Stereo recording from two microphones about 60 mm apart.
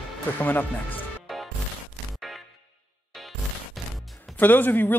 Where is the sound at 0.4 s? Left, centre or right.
Left.